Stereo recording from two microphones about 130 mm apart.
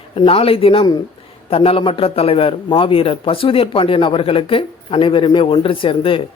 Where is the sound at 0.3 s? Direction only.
45° left (ahead or behind).